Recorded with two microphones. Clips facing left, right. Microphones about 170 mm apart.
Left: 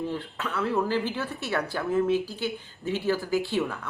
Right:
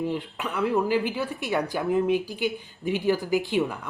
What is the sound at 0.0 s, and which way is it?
Speech, 15° right (ahead or behind).